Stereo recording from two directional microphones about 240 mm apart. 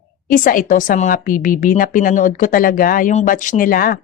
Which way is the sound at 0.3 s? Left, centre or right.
Left.